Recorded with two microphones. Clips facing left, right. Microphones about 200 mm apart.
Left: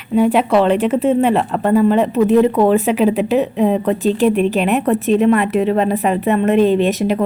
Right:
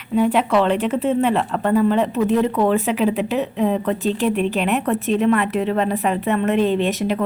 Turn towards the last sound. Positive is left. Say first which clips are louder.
# left 5 dB
turn(degrees=10)  # may be behind; listen again after turning